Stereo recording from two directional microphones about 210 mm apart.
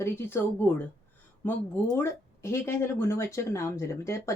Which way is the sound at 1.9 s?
15° left (ahead or behind).